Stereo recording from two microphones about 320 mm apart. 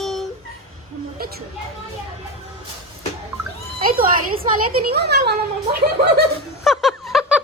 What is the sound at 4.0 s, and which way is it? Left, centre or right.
A woman's voice, right.